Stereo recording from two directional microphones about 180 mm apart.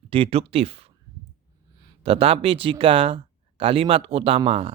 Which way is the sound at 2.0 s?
30° right (ahead or behind).